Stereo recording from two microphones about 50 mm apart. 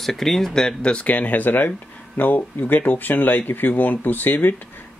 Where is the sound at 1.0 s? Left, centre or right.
Left.